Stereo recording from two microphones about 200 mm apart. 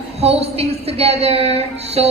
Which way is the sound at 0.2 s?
30° right (ahead or behind).